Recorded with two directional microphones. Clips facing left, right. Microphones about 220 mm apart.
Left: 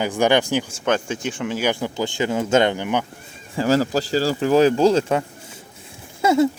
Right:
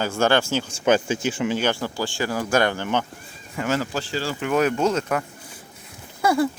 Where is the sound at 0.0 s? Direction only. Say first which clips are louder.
Left 2 dB; 15° left (ahead or behind).